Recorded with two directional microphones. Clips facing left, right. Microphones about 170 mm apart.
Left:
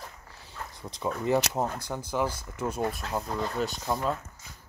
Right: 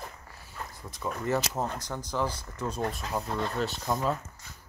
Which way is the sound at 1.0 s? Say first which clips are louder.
Left 3 dB; 15° left (ahead or behind).